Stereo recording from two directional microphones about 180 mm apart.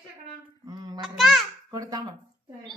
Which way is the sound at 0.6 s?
20° right (ahead or behind).